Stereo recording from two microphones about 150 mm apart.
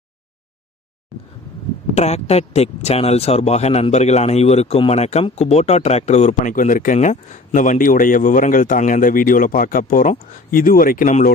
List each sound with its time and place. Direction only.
2.0 s speech: 45° left (ahead or behind); by 11.3 s 65° left (ahead or behind)